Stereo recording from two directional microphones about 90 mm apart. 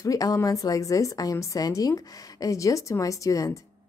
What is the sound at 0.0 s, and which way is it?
A woman's voice, 40° left (ahead or behind).